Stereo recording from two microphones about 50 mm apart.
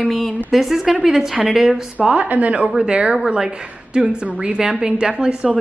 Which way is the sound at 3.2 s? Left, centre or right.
Centre.